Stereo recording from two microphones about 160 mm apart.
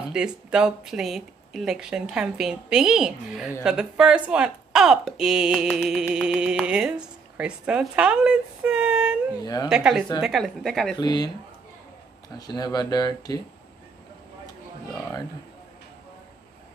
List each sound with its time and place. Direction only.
0.1 s a woman's voice: 5° right (ahead or behind)
9.4 s speech: 25° left (ahead or behind)
9.7 s speech: 5° right (ahead or behind)
11.0 s speech: 25° left (ahead or behind)
12.4 s speech: 25° left (ahead or behind)